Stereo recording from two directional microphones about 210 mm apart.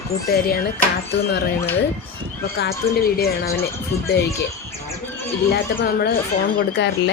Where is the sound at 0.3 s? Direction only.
45° left (ahead or behind).